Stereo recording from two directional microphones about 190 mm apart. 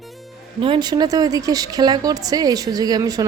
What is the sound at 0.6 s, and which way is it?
A woman's voice, 25° right (ahead or behind).